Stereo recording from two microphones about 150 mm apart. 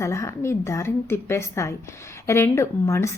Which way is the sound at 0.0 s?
20° left (ahead or behind).